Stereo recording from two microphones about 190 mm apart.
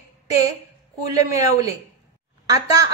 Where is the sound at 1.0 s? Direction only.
15° right (ahead or behind).